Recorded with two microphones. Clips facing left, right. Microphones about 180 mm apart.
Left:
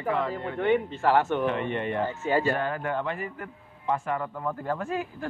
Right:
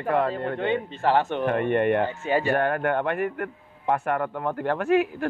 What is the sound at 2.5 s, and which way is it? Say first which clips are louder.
A man's voice: right 5 dB; 60° right (ahead or behind).